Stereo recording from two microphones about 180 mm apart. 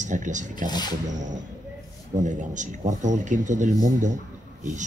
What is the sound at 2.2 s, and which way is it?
A man's voice, 45° right (ahead or behind).